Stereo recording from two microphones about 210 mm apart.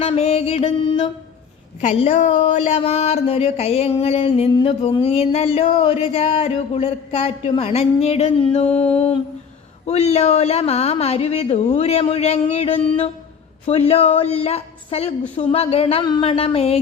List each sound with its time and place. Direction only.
0.0 s speech: 30° left (ahead or behind)